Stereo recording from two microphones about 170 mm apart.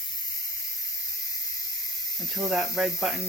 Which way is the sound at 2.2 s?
Centre (ahead or behind).